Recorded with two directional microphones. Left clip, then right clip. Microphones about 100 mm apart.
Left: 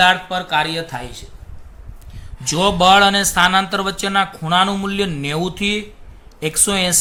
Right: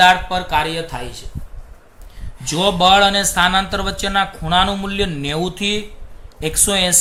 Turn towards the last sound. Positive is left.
turn(degrees=35)  # may be behind; listen again after turning